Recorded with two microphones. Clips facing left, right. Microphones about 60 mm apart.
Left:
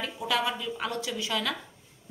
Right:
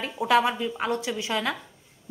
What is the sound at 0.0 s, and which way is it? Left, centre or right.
A woman's voice, right.